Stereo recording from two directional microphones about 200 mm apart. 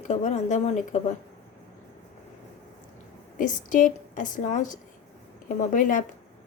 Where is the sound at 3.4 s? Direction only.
40° left (ahead or behind).